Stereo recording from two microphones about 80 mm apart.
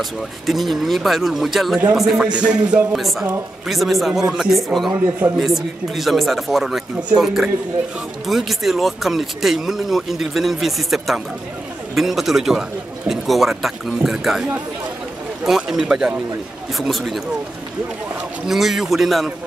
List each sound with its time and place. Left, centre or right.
0.5 s a man's voice: centre
2.9 s speech: centre
15.4 s a man's voice: centre
18.5 s speech: centre